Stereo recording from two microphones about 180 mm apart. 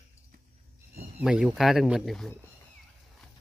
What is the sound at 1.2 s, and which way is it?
Speech, 5° right (ahead or behind).